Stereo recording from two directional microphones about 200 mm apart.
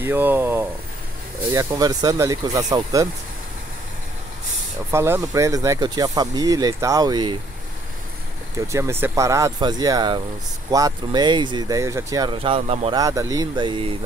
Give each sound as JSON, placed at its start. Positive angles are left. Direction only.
{"t": 0.0, "sound": "speech", "side_deg": -10}
{"t": 4.9, "sound": "speech", "side_deg": -10}
{"t": 8.5, "sound": "speech", "side_deg": -15}
{"t": 12.9, "sound": "speech", "side_deg": -15}